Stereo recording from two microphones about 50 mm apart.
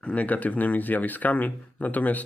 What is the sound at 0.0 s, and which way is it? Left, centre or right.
Speech, left.